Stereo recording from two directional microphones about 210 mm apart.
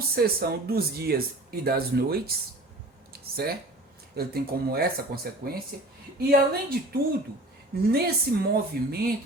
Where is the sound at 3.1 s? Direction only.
50° right (ahead or behind).